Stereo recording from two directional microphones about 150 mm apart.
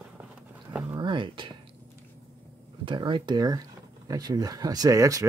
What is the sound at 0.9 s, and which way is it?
Speech, 30° right (ahead or behind).